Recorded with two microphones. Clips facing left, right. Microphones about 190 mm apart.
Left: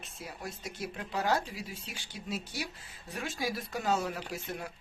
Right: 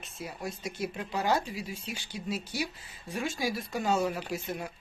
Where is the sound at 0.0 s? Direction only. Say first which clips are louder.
Right 4 dB; centre (ahead or behind).